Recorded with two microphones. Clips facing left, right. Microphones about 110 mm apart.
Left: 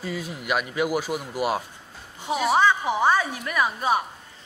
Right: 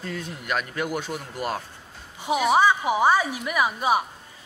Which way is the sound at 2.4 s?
10° right (ahead or behind).